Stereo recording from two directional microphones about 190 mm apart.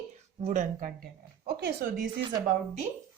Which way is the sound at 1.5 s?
55° right (ahead or behind).